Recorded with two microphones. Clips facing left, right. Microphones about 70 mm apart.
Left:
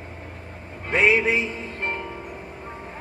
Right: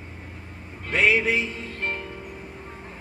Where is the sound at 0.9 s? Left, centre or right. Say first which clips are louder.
Left 2 dB; left.